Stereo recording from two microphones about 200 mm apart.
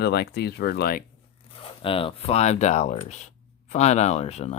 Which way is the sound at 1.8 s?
25° left (ahead or behind).